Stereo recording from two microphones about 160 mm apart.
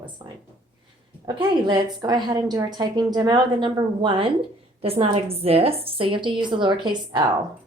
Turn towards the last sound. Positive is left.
turn(degrees=-30)  # may be behind; listen again after turning